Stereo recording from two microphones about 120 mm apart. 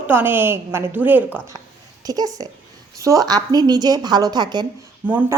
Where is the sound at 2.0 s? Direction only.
35° right (ahead or behind).